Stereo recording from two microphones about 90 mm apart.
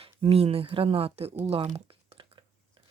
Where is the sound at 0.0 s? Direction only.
90° right.